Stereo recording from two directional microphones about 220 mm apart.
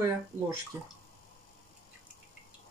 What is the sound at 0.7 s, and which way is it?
Speech, 10° right (ahead or behind).